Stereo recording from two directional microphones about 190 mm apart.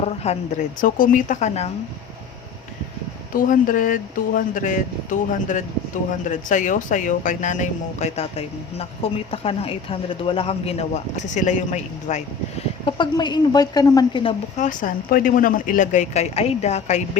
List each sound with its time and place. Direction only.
0.0 s speech: 35° left (ahead or behind)
3.3 s speech: 45° left (ahead or behind)
12.8 s speech: 25° left (ahead or behind)
14.5 s speech: 40° left (ahead or behind)